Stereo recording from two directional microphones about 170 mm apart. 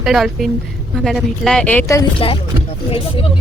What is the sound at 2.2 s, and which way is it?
Speech, 30° left (ahead or behind).